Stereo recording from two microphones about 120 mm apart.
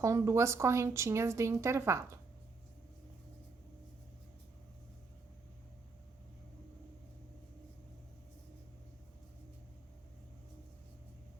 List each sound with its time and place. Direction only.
0.0 s a woman's voice: 25° right (ahead or behind)